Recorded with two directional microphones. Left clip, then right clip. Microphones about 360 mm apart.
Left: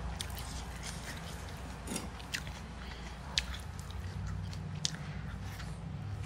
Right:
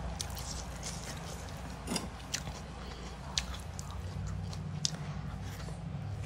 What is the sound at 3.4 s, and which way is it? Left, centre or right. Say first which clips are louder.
Chewing: left 2 dB; centre.